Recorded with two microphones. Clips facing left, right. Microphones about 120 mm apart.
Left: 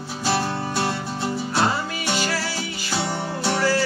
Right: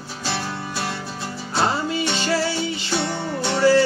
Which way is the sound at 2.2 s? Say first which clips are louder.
Right 4 dB; 25° right (ahead or behind).